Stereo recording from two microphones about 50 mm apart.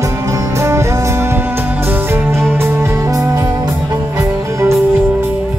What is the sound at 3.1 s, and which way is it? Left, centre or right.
Music, right.